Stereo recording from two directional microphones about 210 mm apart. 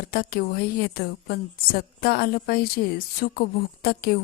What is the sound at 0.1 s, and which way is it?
A woman's voice, 45° left (ahead or behind).